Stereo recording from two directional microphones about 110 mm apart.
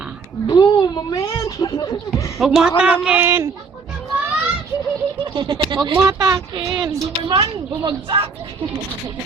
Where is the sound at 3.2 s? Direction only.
20° right (ahead or behind).